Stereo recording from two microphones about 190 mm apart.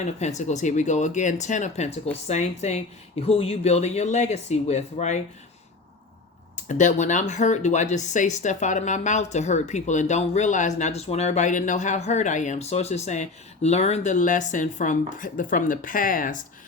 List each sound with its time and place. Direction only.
0.0 s speech: 35° left (ahead or behind)
6.7 s speech: 40° left (ahead or behind)